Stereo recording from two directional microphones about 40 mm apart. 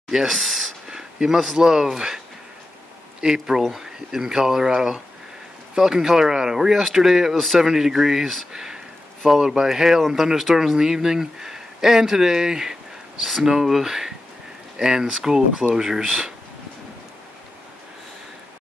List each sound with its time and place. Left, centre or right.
0.1 s speech: centre
0.4 s speech: centre
0.8 s speech: centre